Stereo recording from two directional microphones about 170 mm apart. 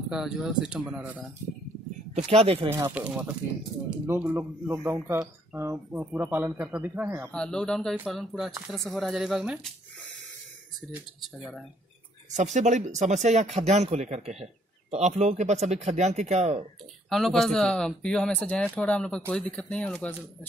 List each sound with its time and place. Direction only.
0.1 s speech: 5° right (ahead or behind)
2.1 s speech: 40° right (ahead or behind)
2.7 s speech: 10° right (ahead or behind)
7.3 s speech: 5° left (ahead or behind)
12.3 s speech: 45° right (ahead or behind)
17.1 s speech: centre (ahead or behind)